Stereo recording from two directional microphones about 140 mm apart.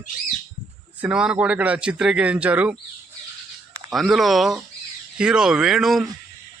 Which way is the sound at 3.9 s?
Centre (ahead or behind).